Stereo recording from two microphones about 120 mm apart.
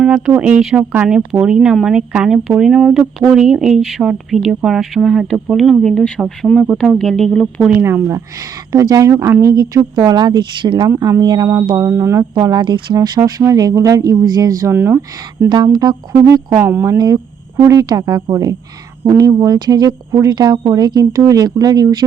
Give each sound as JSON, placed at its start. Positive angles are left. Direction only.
{"t": 0.0, "sound": "speech", "side_deg": -10}
{"t": 7.7, "sound": "speech", "side_deg": -15}
{"t": 10.8, "sound": "speech", "side_deg": -25}
{"t": 12.3, "sound": "speech", "side_deg": -40}
{"t": 15.4, "sound": "speech", "side_deg": -35}